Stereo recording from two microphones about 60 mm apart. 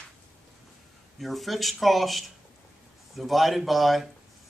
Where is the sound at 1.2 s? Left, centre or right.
Centre.